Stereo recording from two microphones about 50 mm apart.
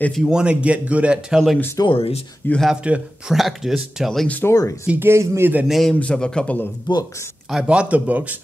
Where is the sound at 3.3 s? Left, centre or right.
Centre.